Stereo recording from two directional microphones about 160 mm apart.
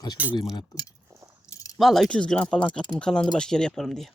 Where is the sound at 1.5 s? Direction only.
20° left (ahead or behind).